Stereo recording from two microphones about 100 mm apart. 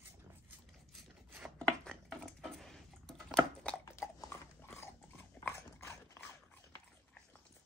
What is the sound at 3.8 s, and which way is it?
Dog, 30° left (ahead or behind).